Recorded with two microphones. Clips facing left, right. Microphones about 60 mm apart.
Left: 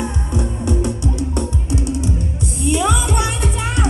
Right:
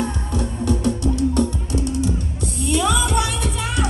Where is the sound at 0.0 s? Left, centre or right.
Centre.